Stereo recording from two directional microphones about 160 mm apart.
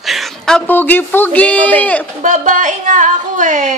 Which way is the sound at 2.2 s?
55° right (ahead or behind).